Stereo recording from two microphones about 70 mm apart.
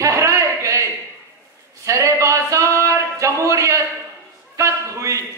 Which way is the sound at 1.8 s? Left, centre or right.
Right.